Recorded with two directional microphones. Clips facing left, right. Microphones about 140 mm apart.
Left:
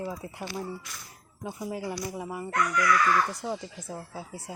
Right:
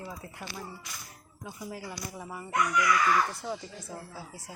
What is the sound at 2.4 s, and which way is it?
Speech, 15° right (ahead or behind).